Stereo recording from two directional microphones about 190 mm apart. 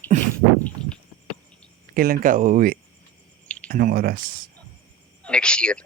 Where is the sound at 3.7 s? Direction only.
50° right (ahead or behind).